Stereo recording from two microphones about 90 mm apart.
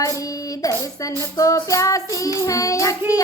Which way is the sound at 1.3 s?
40° left (ahead or behind).